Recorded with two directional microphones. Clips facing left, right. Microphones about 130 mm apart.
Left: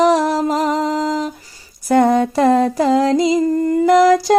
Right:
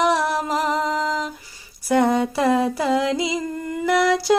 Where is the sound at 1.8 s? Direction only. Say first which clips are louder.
Left 5 dB; 45° left (ahead or behind).